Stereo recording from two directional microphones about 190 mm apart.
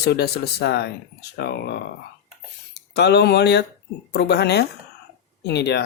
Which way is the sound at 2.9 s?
60° left (ahead or behind).